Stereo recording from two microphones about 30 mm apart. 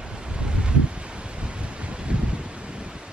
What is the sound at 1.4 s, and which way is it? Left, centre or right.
Waves, right.